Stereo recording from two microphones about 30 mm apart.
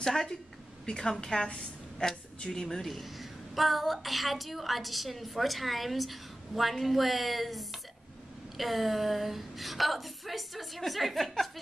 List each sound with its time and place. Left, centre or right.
0.0 s a woman's voice: centre
2.5 s a woman's voice: centre
2.9 s a woman's voice: centre